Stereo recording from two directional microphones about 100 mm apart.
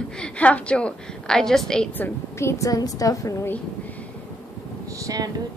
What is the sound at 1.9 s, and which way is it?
Speech, 20° left (ahead or behind).